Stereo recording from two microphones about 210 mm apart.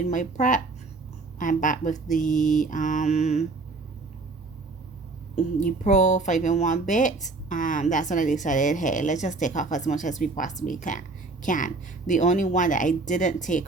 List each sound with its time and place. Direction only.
0.0 s speech: 35° left (ahead or behind)
5.5 s speech: 35° left (ahead or behind)